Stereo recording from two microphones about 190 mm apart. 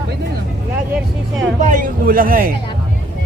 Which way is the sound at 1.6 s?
45° right (ahead or behind).